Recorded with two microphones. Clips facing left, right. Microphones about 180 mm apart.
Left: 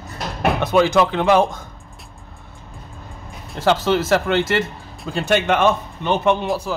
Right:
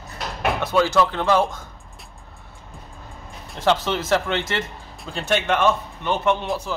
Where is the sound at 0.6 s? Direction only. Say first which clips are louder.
Left 3 dB; 20° left (ahead or behind).